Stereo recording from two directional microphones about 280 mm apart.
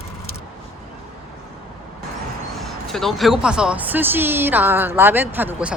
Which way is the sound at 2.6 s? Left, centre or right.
Centre.